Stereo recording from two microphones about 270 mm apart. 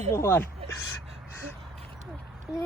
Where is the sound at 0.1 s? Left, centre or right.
Centre.